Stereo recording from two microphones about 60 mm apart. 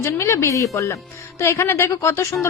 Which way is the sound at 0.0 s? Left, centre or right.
Left.